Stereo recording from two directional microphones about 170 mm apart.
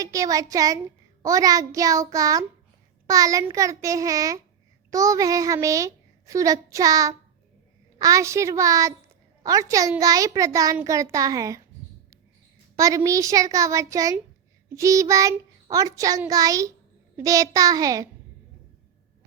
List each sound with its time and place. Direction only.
0.0 s a child's voice: 20° right (ahead or behind)
12.7 s a woman's voice: 20° right (ahead or behind)